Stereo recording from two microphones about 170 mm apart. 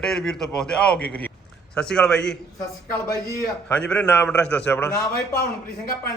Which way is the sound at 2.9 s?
20° left (ahead or behind).